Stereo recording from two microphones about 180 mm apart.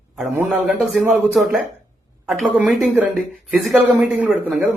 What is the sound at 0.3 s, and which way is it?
A man's voice, 5° right (ahead or behind).